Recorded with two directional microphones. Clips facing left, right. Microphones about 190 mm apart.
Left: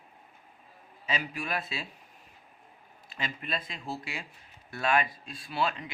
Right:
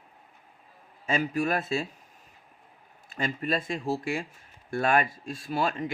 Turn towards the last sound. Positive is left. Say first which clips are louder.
# right 3 dB
turn(degrees=-45)  # may be behind; listen again after turning